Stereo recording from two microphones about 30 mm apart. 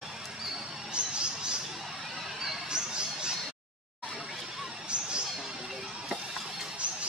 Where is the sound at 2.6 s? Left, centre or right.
Right.